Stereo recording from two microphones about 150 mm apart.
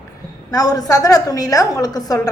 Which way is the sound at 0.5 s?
25° left (ahead or behind).